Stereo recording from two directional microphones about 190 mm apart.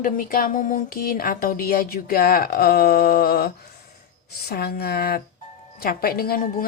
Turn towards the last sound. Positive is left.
turn(degrees=50)  # may be behind; listen again after turning